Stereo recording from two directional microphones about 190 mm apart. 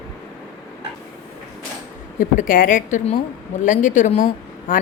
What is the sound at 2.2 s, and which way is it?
A woman's voice, 45° left (ahead or behind).